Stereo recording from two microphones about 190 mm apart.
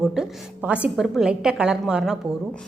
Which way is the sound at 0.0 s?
5° right (ahead or behind).